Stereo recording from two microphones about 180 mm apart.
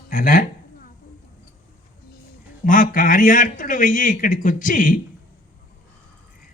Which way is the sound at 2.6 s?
50° left (ahead or behind).